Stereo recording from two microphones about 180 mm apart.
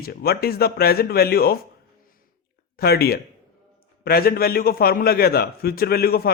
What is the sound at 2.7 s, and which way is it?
A man's voice, 60° left (ahead or behind).